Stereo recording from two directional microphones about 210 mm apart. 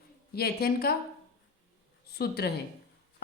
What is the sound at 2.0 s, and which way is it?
Speech, 50° left (ahead or behind).